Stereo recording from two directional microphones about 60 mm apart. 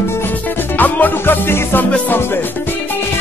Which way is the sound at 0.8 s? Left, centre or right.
Left.